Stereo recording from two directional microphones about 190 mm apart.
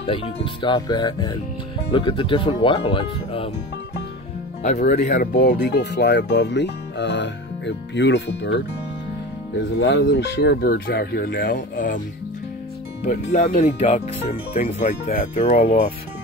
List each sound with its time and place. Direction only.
0.0 s speech: 30° left (ahead or behind)
4.6 s speech: 40° left (ahead or behind)
5.3 s speech: 60° left (ahead or behind)
9.7 s speech: 65° left (ahead or behind); by 12.0 s 45° left (ahead or behind)
13.0 s speech: 35° left (ahead or behind)